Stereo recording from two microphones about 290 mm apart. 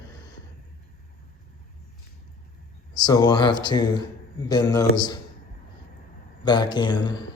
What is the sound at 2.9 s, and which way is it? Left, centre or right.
Speech, centre.